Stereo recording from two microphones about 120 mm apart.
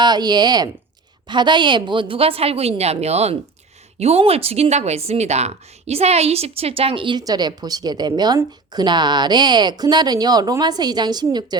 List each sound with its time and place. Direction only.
0.0 s a woman's voice: 35° right (ahead or behind)